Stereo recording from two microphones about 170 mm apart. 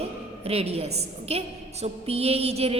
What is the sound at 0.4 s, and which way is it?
A woman's voice, 35° right (ahead or behind).